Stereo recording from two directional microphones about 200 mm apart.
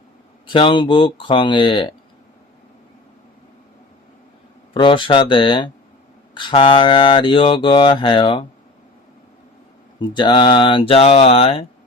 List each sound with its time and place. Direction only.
0.4 s speech: 25° left (ahead or behind)
4.7 s speech: 25° left (ahead or behind)
10.2 s speech: 25° left (ahead or behind)